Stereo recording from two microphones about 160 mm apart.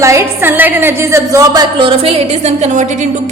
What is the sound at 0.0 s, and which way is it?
A woman's voice, 15° right (ahead or behind).